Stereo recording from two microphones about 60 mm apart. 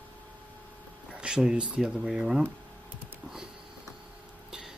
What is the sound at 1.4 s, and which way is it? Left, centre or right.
Speech, centre.